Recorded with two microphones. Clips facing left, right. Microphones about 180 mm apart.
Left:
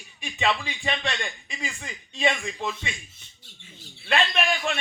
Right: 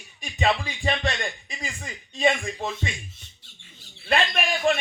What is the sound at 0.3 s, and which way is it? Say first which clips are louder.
Speech: right 2 dB; 35° right (ahead or behind).